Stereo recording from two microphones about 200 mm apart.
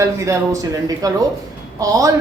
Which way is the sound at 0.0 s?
15° right (ahead or behind).